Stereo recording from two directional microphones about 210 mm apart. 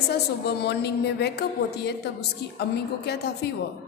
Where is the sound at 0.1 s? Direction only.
50° left (ahead or behind).